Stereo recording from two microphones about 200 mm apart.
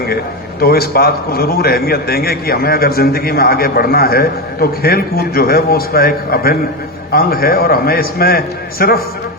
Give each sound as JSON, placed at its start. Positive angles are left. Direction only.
{"t": 0.6, "sound": "a man's voice", "side_deg": 50}